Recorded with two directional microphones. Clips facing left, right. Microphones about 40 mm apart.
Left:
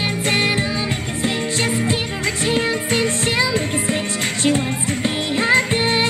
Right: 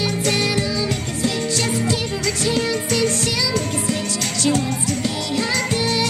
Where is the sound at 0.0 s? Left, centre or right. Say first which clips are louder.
Left 1 dB; left.